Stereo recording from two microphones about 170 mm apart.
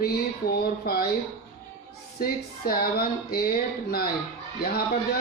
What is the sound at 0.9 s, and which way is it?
Speech, 60° left (ahead or behind).